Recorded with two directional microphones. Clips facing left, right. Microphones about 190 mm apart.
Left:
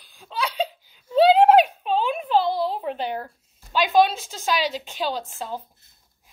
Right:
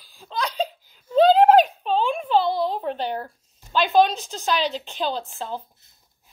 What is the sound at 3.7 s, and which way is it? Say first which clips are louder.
A woman's voice: even; 5° left (ahead or behind).